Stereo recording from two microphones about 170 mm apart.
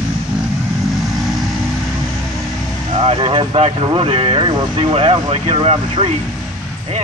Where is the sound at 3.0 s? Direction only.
35° right (ahead or behind).